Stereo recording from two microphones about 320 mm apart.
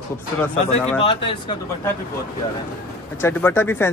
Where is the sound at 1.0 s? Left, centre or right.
Centre.